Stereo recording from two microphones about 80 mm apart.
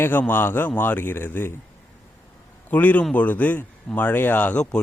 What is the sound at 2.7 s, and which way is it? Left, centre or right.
A man's voice, left.